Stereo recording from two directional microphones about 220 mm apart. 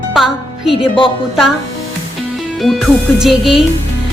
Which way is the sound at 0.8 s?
25° left (ahead or behind).